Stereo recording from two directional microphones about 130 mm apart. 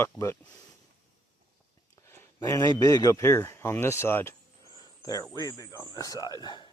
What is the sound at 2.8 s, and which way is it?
Speech, 25° left (ahead or behind).